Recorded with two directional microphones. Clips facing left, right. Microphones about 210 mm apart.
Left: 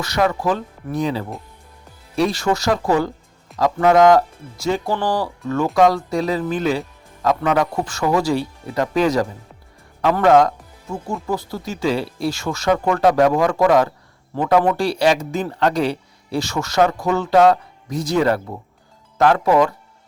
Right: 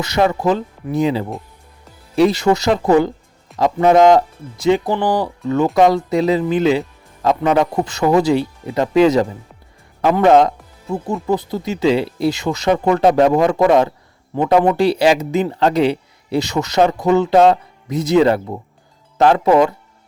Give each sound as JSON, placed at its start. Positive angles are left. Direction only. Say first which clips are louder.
{"t": 0.0, "sound": "speech", "louder": "right 3 dB", "side_deg": -20}